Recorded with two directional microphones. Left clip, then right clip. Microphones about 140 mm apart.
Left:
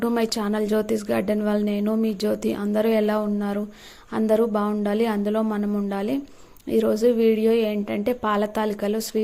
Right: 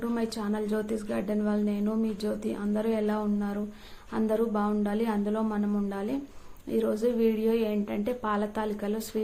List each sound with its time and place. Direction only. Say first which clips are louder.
0.0 s a woman's voice: left 8 dB; 65° left (ahead or behind); by 9.2 s 45° left (ahead or behind)